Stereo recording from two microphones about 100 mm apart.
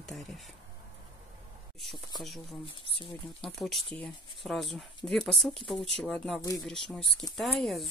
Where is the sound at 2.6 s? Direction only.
65° left (ahead or behind).